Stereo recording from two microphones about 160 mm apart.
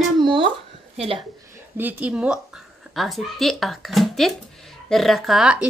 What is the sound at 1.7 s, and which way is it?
Speech, 10° right (ahead or behind).